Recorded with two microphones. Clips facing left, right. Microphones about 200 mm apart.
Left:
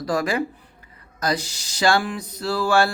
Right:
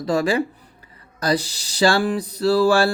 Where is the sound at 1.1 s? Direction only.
35° right (ahead or behind).